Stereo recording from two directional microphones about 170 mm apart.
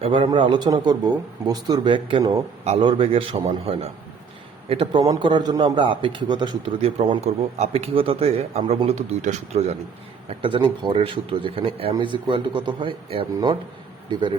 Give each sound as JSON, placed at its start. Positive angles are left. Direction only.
{"t": 0.0, "sound": "a man's voice", "side_deg": -30}